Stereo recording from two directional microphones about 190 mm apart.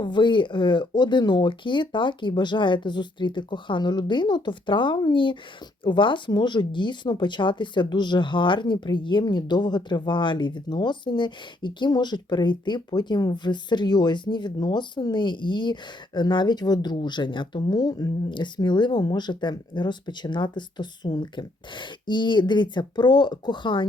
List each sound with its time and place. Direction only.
0.0 s speech: 25° left (ahead or behind)